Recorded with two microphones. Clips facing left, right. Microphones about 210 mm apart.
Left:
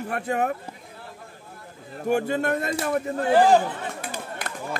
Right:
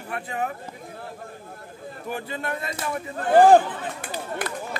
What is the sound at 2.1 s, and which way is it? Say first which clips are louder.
Speech: left 8 dB; 50° left (ahead or behind).